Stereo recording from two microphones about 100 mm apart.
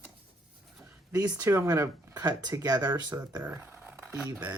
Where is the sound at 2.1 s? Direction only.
40° right (ahead or behind).